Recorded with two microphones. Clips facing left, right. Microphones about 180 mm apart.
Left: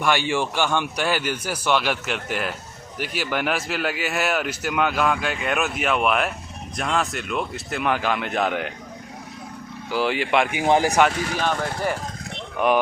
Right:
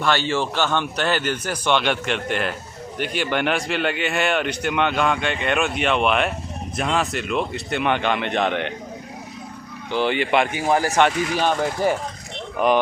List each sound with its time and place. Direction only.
0.0 s a man's voice: 15° left (ahead or behind)
9.9 s a man's voice: centre (ahead or behind)
10.5 s a man's voice: 20° left (ahead or behind)
12.5 s a man's voice: centre (ahead or behind)